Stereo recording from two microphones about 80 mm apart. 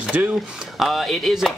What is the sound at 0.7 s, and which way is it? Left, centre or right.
Speech, centre.